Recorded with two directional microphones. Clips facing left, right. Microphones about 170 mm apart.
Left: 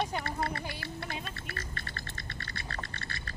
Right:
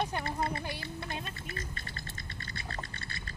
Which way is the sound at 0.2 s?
20° right (ahead or behind).